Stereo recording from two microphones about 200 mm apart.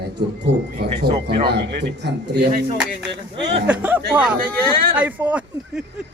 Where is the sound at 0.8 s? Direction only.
50° right (ahead or behind).